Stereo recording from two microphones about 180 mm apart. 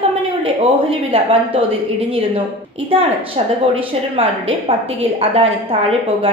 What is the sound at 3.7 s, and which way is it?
A woman's voice, 30° right (ahead or behind).